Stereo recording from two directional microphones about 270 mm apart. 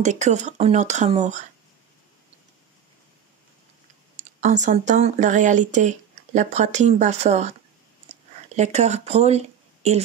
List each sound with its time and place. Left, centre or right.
0.0 s speech: right
4.4 s speech: right